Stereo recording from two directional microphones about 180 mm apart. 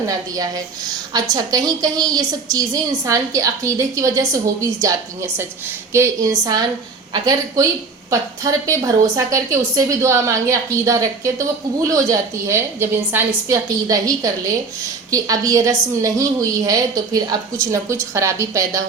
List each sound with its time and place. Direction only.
0.3 s a woman's voice: 20° right (ahead or behind)